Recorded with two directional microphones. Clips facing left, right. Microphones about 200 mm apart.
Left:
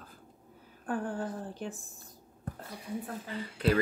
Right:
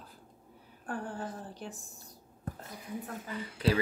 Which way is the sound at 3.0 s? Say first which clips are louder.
Left 1 dB; 35° left (ahead or behind).